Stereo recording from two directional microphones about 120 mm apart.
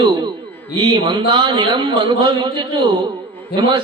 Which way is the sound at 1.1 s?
40° right (ahead or behind).